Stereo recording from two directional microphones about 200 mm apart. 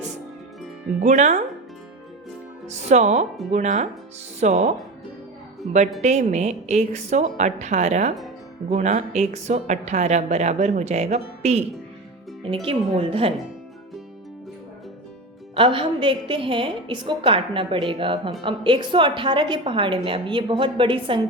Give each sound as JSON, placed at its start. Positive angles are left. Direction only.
{"t": 1.0, "sound": "speech", "side_deg": -35}
{"t": 2.6, "sound": "speech", "side_deg": -35}
{"t": 12.6, "sound": "a woman's voice", "side_deg": -30}
{"t": 15.5, "sound": "a woman's voice", "side_deg": -25}